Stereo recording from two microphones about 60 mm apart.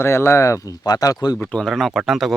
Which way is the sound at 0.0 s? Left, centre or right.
Left.